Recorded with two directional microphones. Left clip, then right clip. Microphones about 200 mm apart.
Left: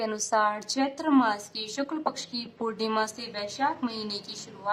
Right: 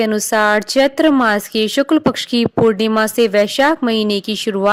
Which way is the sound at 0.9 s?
15° right (ahead or behind).